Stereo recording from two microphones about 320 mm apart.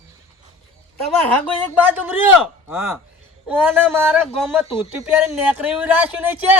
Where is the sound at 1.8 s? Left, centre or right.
Centre.